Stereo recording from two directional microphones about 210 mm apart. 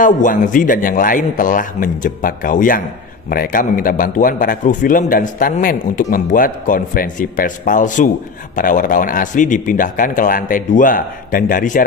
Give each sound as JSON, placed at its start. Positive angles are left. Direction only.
{"t": 0.0, "sound": "a man's voice", "side_deg": 40}